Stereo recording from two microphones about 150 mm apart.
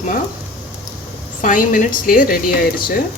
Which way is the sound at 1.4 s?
65° left (ahead or behind).